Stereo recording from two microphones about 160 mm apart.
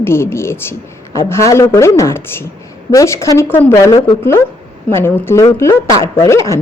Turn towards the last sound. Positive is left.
turn(degrees=15)  # may be behind; listen again after turning